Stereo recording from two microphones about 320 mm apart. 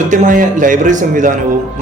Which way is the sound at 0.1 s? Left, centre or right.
Right.